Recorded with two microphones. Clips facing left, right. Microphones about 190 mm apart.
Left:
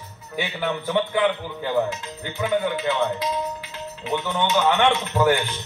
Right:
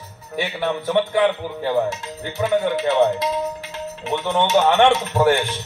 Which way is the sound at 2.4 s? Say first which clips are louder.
Right 3 dB; 40° right (ahead or behind).